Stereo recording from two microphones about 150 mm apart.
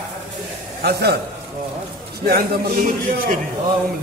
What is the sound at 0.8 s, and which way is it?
Speech, 90° right.